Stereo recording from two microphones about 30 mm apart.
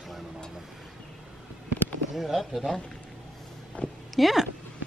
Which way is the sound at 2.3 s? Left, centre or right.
Centre.